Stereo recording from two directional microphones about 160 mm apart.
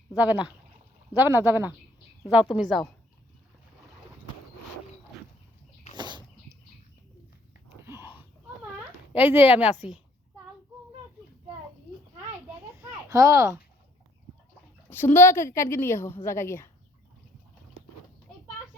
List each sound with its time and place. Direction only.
0.3 s a woman's voice: 5° right (ahead or behind)
6.0 s a sound: 25° right (ahead or behind)
7.9 s a sound: 15° right (ahead or behind)
9.1 s speech: 10° right (ahead or behind)
13.1 s speech: 20° right (ahead or behind)
14.8 s a woman's voice: 15° left (ahead or behind)